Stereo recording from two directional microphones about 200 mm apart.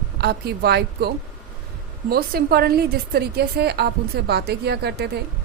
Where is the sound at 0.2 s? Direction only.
50° right (ahead or behind).